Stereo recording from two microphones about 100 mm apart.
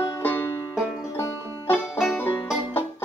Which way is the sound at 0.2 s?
20° left (ahead or behind).